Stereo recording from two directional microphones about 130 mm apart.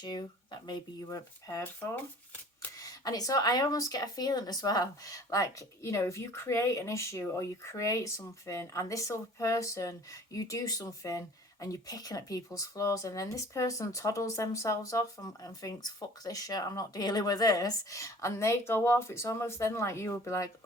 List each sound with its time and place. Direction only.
0.0 s speech: 35° left (ahead or behind)
2.8 s speech: 30° left (ahead or behind)